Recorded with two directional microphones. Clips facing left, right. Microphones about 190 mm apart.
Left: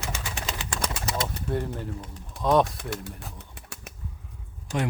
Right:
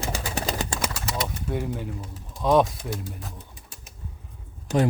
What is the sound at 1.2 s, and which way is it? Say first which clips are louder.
Speech: even; 5° right (ahead or behind).